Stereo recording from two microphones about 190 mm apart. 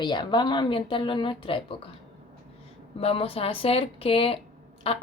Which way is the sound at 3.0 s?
30° left (ahead or behind).